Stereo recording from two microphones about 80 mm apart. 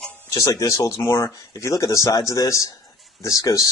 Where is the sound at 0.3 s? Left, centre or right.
Left.